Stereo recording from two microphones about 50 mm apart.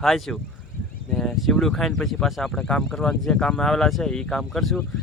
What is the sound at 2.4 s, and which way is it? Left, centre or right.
Speech, centre.